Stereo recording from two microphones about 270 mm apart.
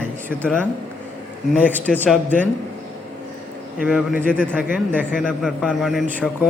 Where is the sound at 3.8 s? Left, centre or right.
Centre.